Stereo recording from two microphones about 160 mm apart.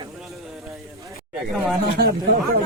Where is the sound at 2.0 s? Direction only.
75° right (ahead or behind).